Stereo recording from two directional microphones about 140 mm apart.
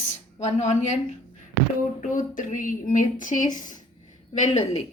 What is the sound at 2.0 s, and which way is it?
Speech, 65° left (ahead or behind).